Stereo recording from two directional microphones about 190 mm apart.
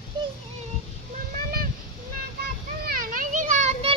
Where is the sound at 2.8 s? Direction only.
50° right (ahead or behind).